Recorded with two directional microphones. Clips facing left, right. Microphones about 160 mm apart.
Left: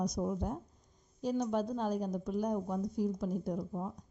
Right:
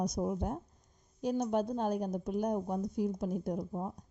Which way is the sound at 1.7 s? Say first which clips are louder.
Right 1 dB; 55° right (ahead or behind).